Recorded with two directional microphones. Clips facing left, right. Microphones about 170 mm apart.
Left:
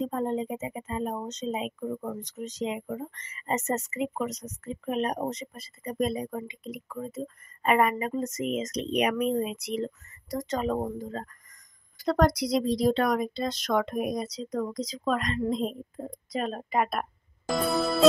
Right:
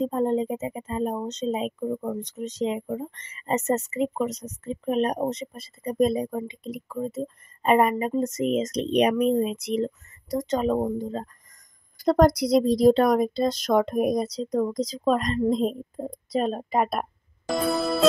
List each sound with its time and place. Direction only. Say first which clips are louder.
0.0 s speech: right 5 dB; 30° right (ahead or behind)
1.8 s speech: right 5 dB; 15° right (ahead or behind)
2.2 s speech: right 5 dB; 25° right (ahead or behind)
12.0 s speech: right 5 dB; 40° right (ahead or behind)
17.5 s music: right 2 dB; centre (ahead or behind)